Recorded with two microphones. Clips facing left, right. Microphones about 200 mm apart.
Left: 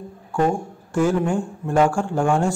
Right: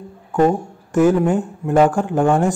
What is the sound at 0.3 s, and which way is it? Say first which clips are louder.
A man's voice: right 5 dB; 20° right (ahead or behind).